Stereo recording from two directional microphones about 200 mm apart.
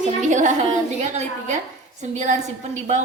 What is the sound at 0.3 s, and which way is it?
A woman's voice, 35° right (ahead or behind).